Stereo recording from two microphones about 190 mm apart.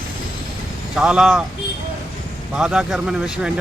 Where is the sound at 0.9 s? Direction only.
5° right (ahead or behind).